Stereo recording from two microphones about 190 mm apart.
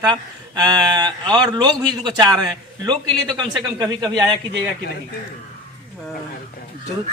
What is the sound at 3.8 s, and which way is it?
Speech, 20° right (ahead or behind).